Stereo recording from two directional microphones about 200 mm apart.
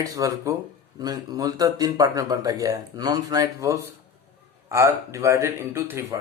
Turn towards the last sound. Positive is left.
turn(degrees=-10)  # may be behind; listen again after turning